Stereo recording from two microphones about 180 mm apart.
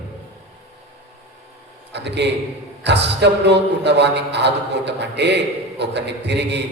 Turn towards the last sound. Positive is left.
turn(degrees=-70)  # may be behind; listen again after turning